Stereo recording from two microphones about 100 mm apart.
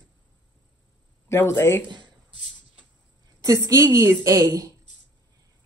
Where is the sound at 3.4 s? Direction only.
35° right (ahead or behind).